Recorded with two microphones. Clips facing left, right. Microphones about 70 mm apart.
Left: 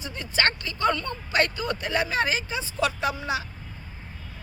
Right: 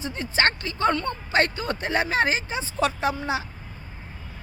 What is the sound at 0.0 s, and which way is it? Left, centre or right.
Speech, right.